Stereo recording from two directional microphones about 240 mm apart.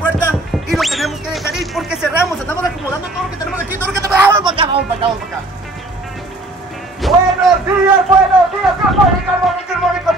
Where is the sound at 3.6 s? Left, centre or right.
Centre.